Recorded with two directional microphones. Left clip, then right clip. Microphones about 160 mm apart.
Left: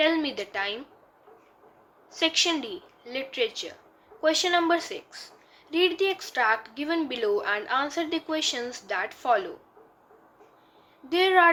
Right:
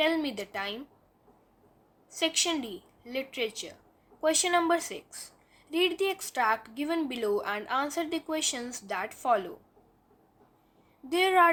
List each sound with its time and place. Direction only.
0.0 s a woman's voice: 25° right (ahead or behind)
2.1 s speech: 25° right (ahead or behind)
11.1 s speech: 30° right (ahead or behind)